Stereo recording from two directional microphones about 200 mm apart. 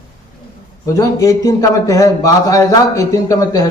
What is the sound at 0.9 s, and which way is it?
A man's voice, 15° left (ahead or behind).